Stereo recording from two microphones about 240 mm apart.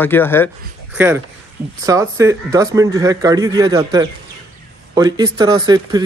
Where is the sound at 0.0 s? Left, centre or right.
Centre.